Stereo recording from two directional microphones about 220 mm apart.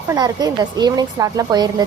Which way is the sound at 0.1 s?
15° right (ahead or behind).